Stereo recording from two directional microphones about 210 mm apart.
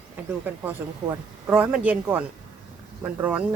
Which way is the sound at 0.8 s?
10° right (ahead or behind).